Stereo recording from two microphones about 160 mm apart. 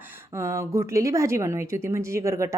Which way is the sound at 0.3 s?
20° right (ahead or behind).